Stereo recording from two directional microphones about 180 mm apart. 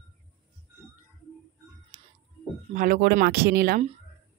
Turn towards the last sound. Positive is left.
turn(degrees=-60)  # may be behind; listen again after turning